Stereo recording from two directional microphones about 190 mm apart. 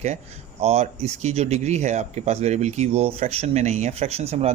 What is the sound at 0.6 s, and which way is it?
Speech, 30° right (ahead or behind).